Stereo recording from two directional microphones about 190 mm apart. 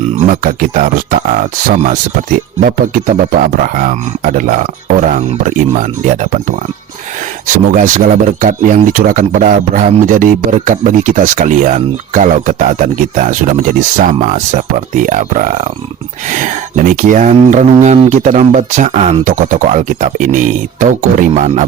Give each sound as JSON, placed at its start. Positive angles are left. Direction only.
{"t": 0.3, "sound": "speech", "side_deg": -45}
{"t": 7.4, "sound": "speech", "side_deg": -45}